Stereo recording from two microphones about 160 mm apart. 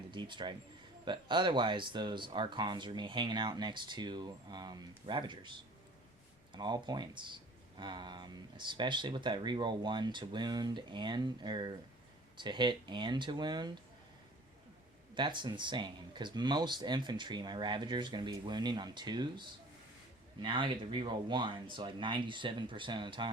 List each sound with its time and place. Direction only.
0.1 s speech: 30° right (ahead or behind)
6.5 s speech: 25° right (ahead or behind)
15.1 s speech: 30° right (ahead or behind)